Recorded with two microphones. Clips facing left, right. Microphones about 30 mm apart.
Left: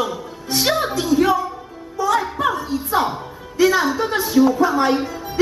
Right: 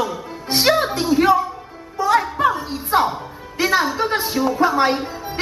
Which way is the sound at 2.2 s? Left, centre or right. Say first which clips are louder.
Right 2 dB; centre.